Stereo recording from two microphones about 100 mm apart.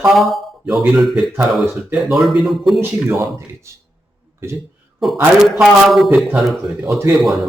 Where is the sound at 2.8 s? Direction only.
25° right (ahead or behind).